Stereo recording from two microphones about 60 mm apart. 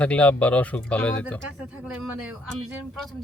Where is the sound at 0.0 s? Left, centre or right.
Left.